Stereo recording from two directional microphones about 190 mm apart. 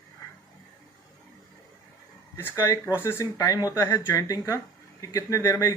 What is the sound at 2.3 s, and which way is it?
Speech, 15° left (ahead or behind).